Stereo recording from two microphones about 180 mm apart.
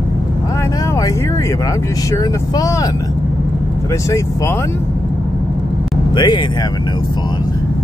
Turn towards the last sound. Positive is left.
turn(degrees=25)  # may be behind; listen again after turning